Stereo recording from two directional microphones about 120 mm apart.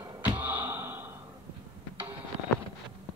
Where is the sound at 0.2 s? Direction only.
15° right (ahead or behind).